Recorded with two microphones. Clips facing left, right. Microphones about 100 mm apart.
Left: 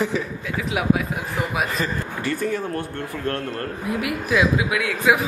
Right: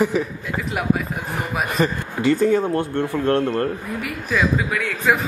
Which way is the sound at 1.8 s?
25° right (ahead or behind).